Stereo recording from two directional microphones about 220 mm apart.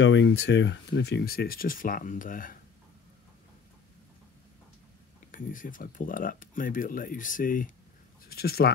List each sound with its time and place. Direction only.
0.0 s speech: 55° left (ahead or behind); by 2.6 s 40° left (ahead or behind)
5.3 s speech: 35° left (ahead or behind)